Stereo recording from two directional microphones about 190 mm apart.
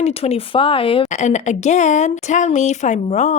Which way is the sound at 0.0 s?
30° left (ahead or behind).